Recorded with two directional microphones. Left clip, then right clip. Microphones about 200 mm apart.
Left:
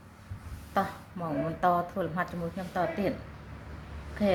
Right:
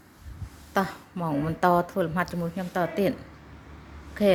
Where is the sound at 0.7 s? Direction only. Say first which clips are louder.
Right 3 dB; 50° right (ahead or behind).